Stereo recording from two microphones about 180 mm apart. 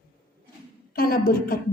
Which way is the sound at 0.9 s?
55° left (ahead or behind).